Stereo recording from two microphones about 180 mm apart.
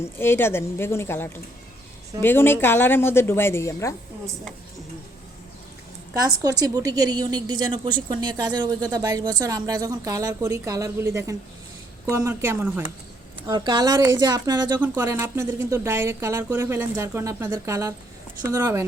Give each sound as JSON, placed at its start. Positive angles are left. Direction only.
{"t": 0.0, "sound": "a woman's voice", "side_deg": 15}
{"t": 6.1, "sound": "a woman's voice", "side_deg": -20}
{"t": 13.5, "sound": "a woman's voice", "side_deg": -25}